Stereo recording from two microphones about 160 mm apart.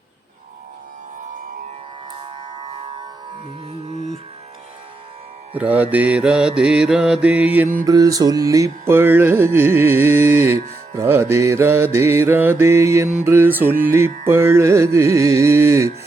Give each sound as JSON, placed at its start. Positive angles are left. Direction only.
{"t": 5.5, "sound": "music", "side_deg": -10}
{"t": 7.9, "sound": "music", "side_deg": -20}